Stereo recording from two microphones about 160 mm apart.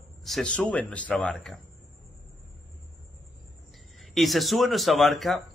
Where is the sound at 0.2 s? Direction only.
5° left (ahead or behind).